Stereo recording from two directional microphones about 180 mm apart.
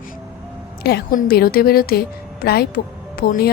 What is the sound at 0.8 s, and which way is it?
A woman's voice, 60° left (ahead or behind).